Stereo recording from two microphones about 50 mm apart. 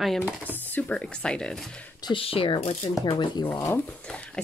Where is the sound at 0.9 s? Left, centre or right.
Centre.